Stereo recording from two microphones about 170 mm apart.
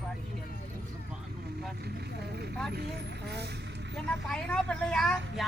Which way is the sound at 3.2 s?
75° right (ahead or behind).